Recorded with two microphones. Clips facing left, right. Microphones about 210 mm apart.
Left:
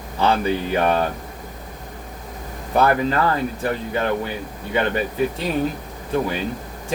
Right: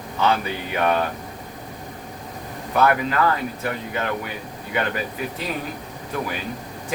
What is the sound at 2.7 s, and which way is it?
Speech, 30° left (ahead or behind).